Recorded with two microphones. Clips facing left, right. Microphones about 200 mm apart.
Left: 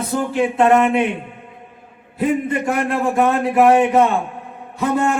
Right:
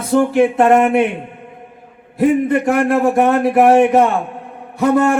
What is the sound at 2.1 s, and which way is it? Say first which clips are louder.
Speech: right 5 dB; 60° right (ahead or behind).